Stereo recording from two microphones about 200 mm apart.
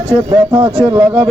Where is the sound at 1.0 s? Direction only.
10° right (ahead or behind).